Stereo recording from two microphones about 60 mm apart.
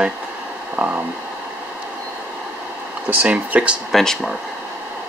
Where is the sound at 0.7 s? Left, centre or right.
Right.